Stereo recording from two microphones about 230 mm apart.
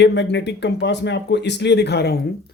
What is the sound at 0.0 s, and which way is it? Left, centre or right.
Speech, left.